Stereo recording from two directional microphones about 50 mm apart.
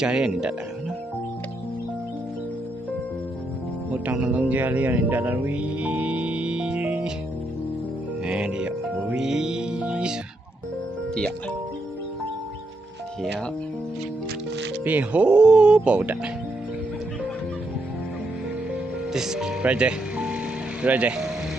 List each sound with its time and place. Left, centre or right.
0.0 s speech: centre
4.1 s speech: right
8.2 s speech: centre
9.1 s music: centre
14.8 s speech: right
19.1 s speech: centre; by 21.2 s right